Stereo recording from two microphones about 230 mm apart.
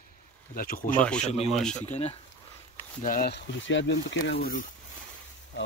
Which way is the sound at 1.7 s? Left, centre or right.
Left.